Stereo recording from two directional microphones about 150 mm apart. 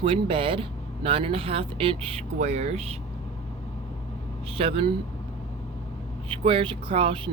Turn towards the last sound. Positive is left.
turn(degrees=-35)  # may be behind; listen again after turning